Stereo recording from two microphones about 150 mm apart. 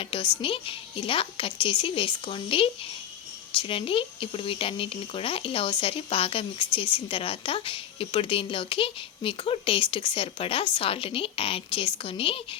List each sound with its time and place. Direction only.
0.0 s speech: 35° left (ahead or behind)